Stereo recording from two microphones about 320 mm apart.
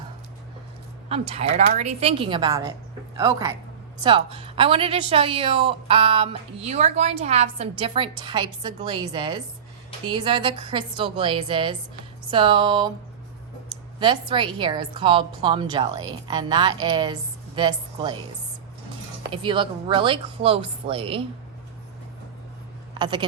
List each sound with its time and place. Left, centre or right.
1.0 s a woman's voice: centre
14.0 s a woman's voice: centre
19.3 s a woman's voice: centre
23.0 s speech: centre